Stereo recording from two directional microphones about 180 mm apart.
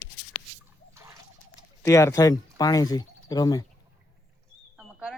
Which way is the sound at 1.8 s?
15° left (ahead or behind).